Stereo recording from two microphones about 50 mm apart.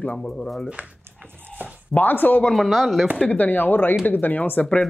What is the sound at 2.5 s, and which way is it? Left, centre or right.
Speech, centre.